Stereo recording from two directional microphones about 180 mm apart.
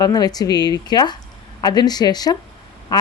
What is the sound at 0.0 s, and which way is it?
Speech, 20° left (ahead or behind).